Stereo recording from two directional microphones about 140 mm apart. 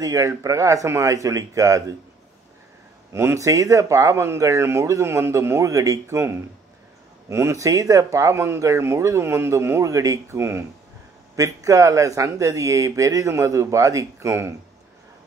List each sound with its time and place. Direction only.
0.0 s speech: 25° right (ahead or behind)
3.1 s speech: 20° right (ahead or behind)